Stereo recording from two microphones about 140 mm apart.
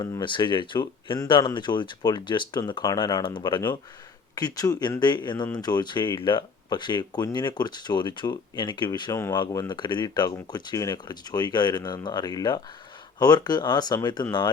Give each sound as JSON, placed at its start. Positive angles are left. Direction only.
{"t": 0.0, "sound": "speech", "side_deg": 30}